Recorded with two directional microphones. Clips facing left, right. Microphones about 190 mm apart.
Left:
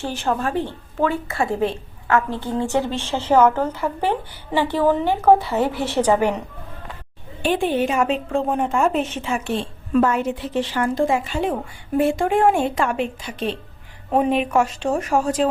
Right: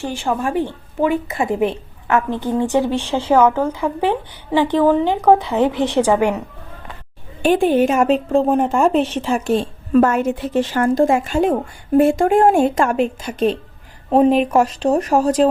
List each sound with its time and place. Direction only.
0.1 s a woman's voice: 10° right (ahead or behind)
7.4 s a woman's voice: 45° right (ahead or behind)